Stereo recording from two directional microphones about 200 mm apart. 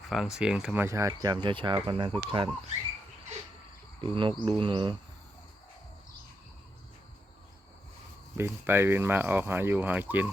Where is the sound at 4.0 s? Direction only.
25° right (ahead or behind).